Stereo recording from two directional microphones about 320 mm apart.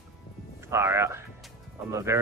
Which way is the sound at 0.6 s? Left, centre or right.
Centre.